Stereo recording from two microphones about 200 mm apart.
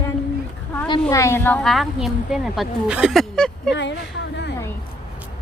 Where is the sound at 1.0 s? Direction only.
15° left (ahead or behind).